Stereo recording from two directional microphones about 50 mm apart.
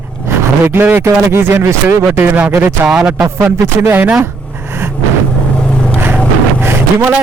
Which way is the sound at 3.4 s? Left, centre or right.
Right.